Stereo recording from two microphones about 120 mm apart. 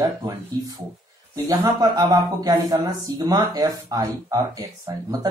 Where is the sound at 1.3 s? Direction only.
30° right (ahead or behind).